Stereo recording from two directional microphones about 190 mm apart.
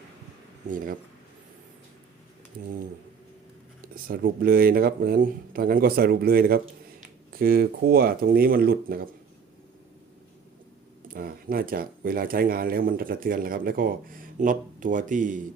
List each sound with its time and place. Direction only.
0.7 s speech: 45° right (ahead or behind)
3.9 s speech: 50° right (ahead or behind)
11.1 s speech: 50° right (ahead or behind)